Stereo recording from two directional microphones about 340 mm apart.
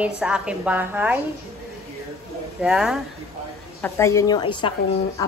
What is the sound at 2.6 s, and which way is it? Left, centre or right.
A woman's voice, centre.